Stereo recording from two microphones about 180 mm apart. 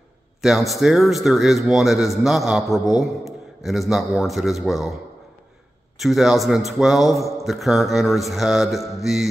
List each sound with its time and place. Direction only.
0.4 s a man's voice: centre (ahead or behind)
5.9 s a man's voice: centre (ahead or behind)